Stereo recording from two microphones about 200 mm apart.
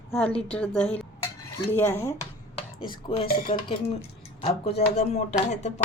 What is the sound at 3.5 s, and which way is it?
A woman's voice, 25° left (ahead or behind).